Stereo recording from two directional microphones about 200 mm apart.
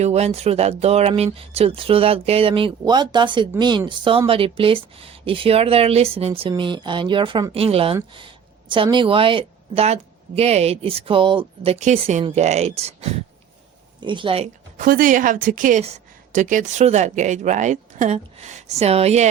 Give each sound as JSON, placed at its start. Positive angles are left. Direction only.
{"t": 0.0, "sound": "a woman's voice", "side_deg": -30}
{"t": 14.8, "sound": "speech", "side_deg": -45}